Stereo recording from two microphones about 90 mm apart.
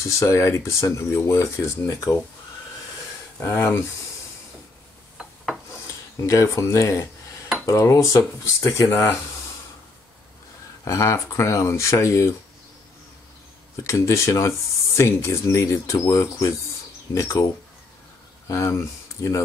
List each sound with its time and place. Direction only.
0.0 s speech: 35° left (ahead or behind)
3.3 s speech: 30° left (ahead or behind)
5.1 s filing: centre (ahead or behind)
6.2 s speech: 35° left (ahead or behind)
10.9 s speech: 35° left (ahead or behind)
13.8 s speech: 35° left (ahead or behind)
18.5 s speech: 35° left (ahead or behind)